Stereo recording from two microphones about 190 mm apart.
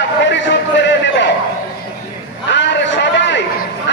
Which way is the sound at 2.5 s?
70° left (ahead or behind).